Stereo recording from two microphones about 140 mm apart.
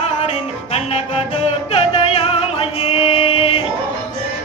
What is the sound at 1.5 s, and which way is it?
Music, 45° left (ahead or behind).